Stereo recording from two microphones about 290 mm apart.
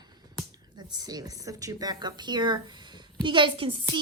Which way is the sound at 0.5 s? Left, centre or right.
Centre.